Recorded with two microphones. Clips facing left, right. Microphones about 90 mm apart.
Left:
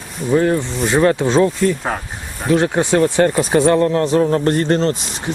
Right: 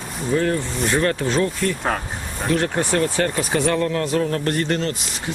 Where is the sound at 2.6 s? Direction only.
20° left (ahead or behind).